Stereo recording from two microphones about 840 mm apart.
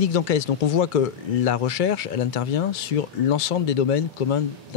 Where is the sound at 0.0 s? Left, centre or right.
Left.